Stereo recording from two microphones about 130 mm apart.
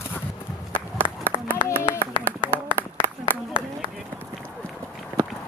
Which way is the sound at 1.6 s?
15° left (ahead or behind).